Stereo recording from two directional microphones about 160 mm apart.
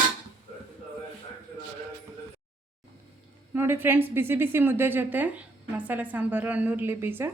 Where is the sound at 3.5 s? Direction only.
15° right (ahead or behind).